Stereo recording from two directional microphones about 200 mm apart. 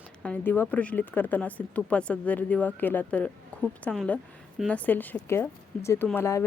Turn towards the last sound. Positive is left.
turn(degrees=10)  # may be behind; listen again after turning